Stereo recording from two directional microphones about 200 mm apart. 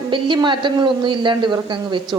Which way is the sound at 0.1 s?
25° right (ahead or behind).